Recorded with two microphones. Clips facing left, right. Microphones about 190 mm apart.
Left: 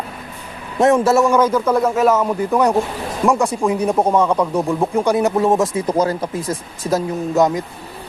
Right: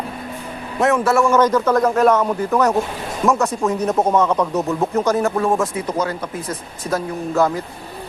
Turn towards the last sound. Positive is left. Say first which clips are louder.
# left 2 dB
turn(degrees=20)  # may be behind; listen again after turning